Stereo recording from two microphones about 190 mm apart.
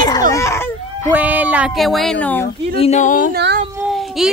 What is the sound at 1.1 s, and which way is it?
A woman's voice, 10° right (ahead or behind).